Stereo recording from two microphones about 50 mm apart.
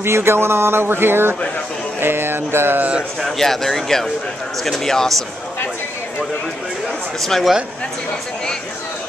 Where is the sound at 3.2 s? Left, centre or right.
Centre.